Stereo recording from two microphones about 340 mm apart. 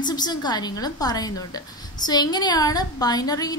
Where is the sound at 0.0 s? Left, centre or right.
Centre.